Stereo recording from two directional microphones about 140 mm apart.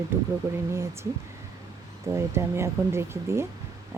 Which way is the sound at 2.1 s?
20° right (ahead or behind).